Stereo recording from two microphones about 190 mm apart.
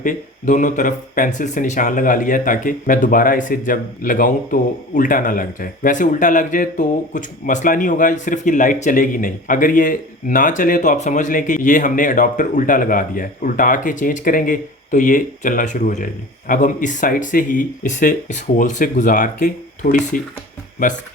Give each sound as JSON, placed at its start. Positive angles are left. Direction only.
{"t": 0.0, "sound": "speech", "side_deg": 40}